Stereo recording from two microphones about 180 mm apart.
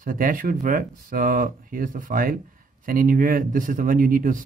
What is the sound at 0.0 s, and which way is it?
Speech, 50° right (ahead or behind).